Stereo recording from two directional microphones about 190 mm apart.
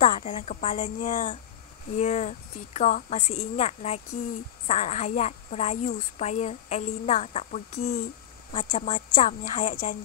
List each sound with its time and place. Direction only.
0.0 s a woman's voice: 40° left (ahead or behind)